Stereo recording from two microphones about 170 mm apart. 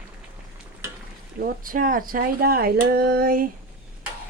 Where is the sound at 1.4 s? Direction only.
55° right (ahead or behind).